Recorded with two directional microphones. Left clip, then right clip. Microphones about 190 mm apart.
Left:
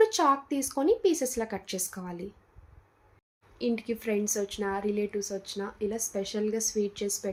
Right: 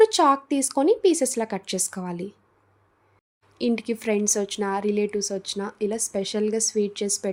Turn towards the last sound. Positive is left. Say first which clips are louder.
# right 5 dB
turn(degrees=-55)  # may be behind; listen again after turning